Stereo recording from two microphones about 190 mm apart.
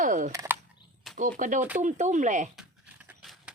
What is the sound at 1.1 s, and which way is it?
Speech, 45° right (ahead or behind).